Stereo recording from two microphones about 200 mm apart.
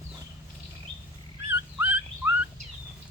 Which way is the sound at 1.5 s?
10° right (ahead or behind).